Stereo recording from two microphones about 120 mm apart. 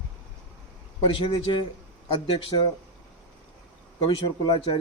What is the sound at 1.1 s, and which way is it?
Speech, 45° left (ahead or behind).